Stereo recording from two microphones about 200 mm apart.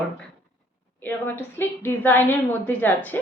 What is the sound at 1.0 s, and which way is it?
A woman's voice, 10° left (ahead or behind).